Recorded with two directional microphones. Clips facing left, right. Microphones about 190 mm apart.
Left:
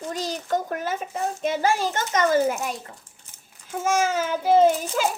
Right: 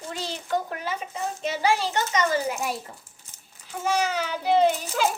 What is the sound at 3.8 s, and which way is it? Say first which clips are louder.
A child's voice: left 3 dB; 45° left (ahead or behind).